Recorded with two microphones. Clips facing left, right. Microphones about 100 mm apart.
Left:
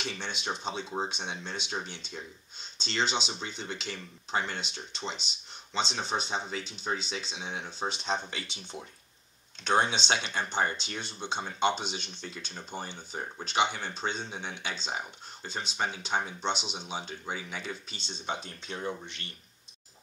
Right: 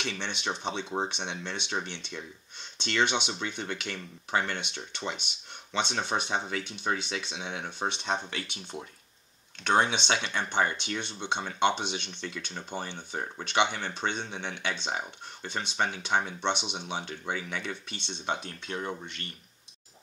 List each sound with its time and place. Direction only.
0.0 s speech: 65° right (ahead or behind)
9.6 s speech: 60° right (ahead or behind)